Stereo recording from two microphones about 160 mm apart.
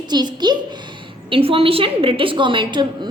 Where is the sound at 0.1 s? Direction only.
25° right (ahead or behind).